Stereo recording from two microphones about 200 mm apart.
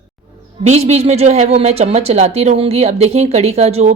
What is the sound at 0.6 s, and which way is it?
A woman's voice, 35° right (ahead or behind).